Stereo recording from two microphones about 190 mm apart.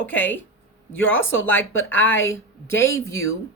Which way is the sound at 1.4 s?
10° left (ahead or behind).